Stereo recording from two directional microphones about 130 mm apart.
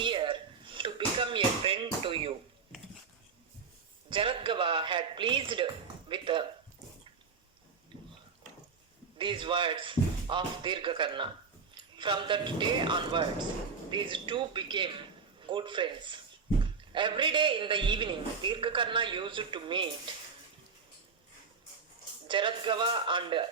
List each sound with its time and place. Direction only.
0.0 s slap: 40° right (ahead or behind)
4.1 s a man's voice: 40° right (ahead or behind)
9.1 s a man's voice: 40° right (ahead or behind)
22.3 s a man's voice: 40° right (ahead or behind)